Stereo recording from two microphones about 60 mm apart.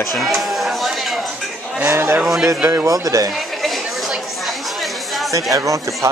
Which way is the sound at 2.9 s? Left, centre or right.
Right.